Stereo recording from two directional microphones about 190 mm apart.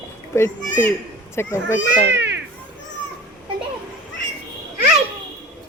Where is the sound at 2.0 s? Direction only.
70° right (ahead or behind).